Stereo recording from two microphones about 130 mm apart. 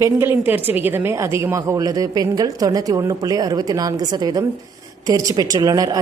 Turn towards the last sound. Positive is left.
turn(degrees=-30)  # may be behind; listen again after turning